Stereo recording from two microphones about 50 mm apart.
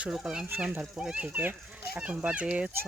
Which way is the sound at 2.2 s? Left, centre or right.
Centre.